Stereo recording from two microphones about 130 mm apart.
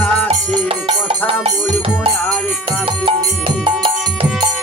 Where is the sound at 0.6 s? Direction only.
45° right (ahead or behind).